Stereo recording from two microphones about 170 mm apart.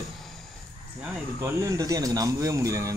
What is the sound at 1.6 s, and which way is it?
Speech, 20° right (ahead or behind).